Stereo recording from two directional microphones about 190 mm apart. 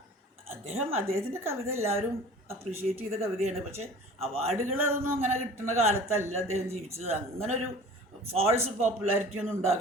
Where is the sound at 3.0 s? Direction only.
30° right (ahead or behind).